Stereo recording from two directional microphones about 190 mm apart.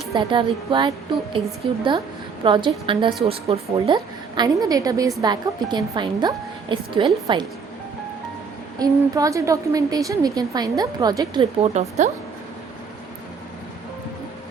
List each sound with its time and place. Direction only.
0.2 s a woman's voice: 25° right (ahead or behind)
2.4 s a woman's voice: 25° right (ahead or behind)
8.8 s a woman's voice: 20° right (ahead or behind)
11.6 s speech: 35° right (ahead or behind)